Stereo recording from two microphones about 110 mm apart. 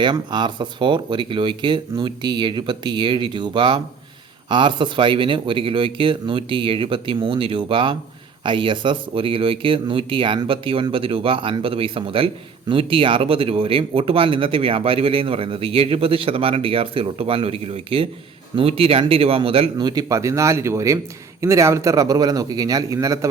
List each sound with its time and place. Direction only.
0.0 s speech: 45° right (ahead or behind)
19.7 s a man's voice: 40° right (ahead or behind)